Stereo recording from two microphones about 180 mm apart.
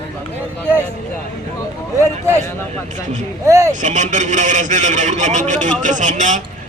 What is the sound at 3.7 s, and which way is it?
Speech, 45° right (ahead or behind).